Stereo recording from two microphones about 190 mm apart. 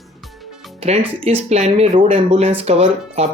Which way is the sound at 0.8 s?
30° right (ahead or behind).